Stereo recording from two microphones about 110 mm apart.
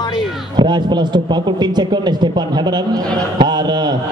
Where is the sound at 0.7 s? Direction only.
45° right (ahead or behind).